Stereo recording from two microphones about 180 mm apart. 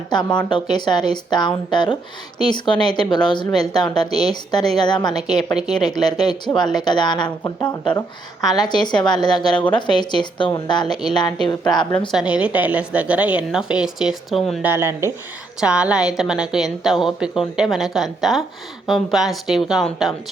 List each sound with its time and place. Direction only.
0.1 s a woman's voice: 25° left (ahead or behind)
12.1 s a woman's voice: 5° right (ahead or behind)